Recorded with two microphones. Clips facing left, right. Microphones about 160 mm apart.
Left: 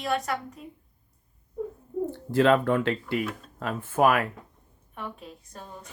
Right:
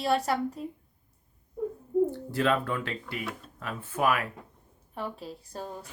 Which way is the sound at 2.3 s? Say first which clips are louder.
Left 7 dB; 55° left (ahead or behind).